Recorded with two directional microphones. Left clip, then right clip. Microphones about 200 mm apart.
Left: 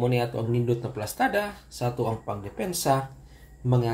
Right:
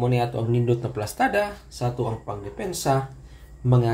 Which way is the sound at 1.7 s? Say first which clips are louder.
Even; 10° left (ahead or behind).